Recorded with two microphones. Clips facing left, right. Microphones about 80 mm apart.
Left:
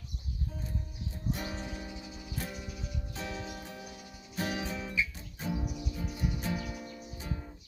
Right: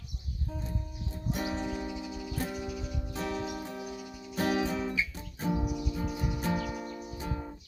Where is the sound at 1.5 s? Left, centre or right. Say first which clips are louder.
Right 7 dB; right.